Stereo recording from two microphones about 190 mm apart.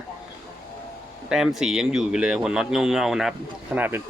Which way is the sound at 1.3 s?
Centre (ahead or behind).